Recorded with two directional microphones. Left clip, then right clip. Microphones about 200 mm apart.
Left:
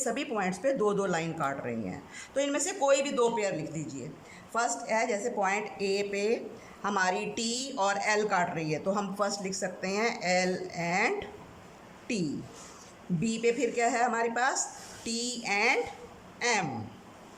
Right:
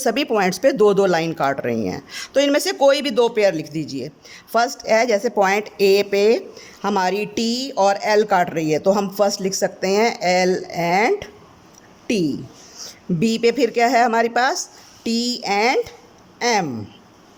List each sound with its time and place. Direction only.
0.0 s speech: 45° right (ahead or behind)
4.9 s speech: 45° right (ahead or behind)